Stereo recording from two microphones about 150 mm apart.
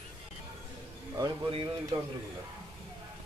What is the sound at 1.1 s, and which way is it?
Speech, 30° right (ahead or behind).